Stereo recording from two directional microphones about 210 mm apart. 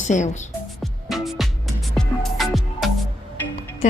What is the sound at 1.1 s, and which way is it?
Music, centre (ahead or behind).